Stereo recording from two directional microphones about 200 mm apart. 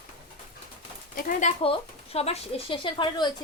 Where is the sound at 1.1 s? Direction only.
45° left (ahead or behind).